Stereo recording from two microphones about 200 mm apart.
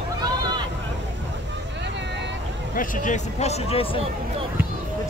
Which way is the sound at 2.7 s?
40° left (ahead or behind).